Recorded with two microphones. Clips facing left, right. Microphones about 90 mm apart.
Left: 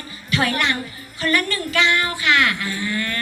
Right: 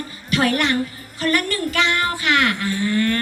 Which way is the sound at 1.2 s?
40° right (ahead or behind).